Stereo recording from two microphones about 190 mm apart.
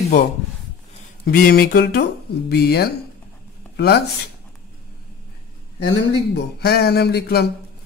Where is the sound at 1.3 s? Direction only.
55° left (ahead or behind).